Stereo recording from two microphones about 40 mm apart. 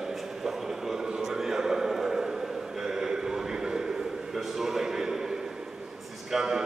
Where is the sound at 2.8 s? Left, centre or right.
Centre.